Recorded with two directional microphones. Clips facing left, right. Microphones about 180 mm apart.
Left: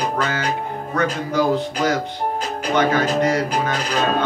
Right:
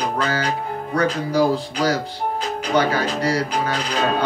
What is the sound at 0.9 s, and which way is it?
Speech, 35° right (ahead or behind).